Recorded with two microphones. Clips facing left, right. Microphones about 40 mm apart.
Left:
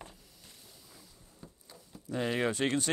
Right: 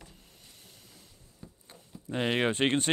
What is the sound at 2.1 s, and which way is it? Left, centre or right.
Speech, right.